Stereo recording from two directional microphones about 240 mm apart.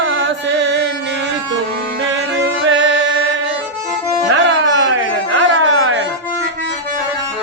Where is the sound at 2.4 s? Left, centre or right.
Right.